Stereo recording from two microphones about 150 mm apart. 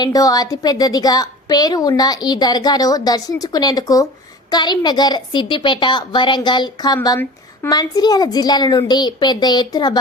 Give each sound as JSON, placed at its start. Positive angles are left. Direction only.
{"t": 0.0, "sound": "a woman's voice", "side_deg": 25}